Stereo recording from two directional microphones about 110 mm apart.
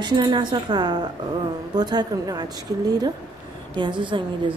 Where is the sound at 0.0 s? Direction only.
45° right (ahead or behind).